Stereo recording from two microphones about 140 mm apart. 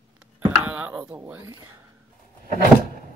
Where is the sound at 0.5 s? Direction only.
10° right (ahead or behind).